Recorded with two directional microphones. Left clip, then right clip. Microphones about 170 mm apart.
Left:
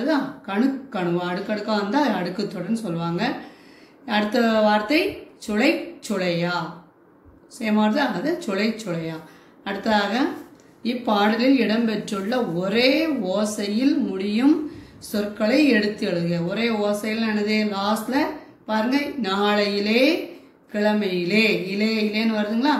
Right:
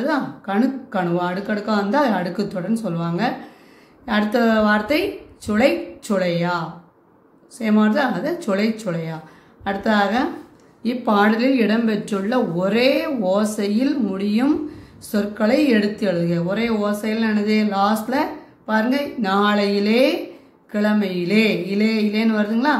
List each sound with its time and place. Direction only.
0.0 s speech: 70° right (ahead or behind)
10.8 s speech: 60° right (ahead or behind)